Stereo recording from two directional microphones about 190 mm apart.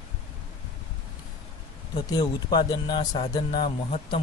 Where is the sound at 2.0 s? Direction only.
20° left (ahead or behind).